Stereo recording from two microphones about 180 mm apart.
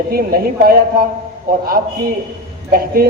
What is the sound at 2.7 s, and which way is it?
Speech, 55° right (ahead or behind).